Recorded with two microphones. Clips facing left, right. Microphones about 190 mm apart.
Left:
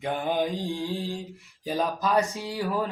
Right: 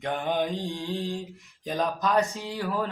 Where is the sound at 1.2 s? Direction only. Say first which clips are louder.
Left 1 dB; centre (ahead or behind).